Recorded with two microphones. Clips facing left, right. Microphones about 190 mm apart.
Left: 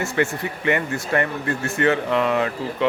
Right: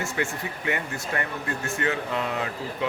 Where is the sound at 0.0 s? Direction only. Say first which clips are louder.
Left 6 dB; 65° left (ahead or behind).